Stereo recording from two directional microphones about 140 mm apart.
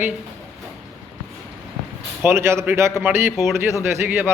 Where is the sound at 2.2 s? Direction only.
20° right (ahead or behind).